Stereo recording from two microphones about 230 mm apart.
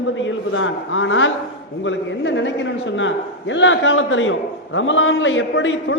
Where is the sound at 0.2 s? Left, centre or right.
Left.